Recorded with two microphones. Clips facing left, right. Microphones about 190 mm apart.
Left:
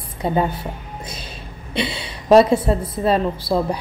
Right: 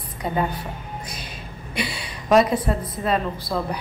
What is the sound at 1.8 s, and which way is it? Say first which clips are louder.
A woman's voice: left 5 dB; 25° left (ahead or behind).